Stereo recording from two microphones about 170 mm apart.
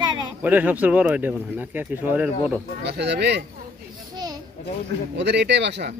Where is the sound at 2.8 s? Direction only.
85° right.